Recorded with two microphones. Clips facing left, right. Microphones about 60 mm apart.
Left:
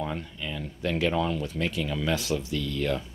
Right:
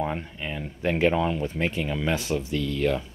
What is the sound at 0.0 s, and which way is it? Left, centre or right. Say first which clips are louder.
Speech: right 3 dB; right.